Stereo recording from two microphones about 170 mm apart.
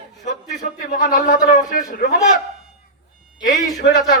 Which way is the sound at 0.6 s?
50° left (ahead or behind).